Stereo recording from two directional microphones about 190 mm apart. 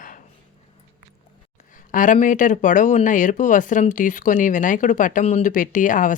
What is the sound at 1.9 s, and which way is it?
Speech, 45° left (ahead or behind).